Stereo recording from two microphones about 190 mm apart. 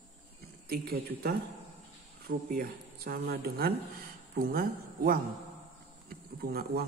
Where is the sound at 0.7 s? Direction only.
55° right (ahead or behind).